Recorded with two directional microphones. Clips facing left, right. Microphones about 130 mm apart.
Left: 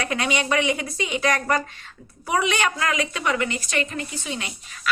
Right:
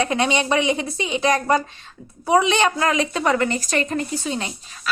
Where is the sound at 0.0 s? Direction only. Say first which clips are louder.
Right 4 dB; 25° right (ahead or behind).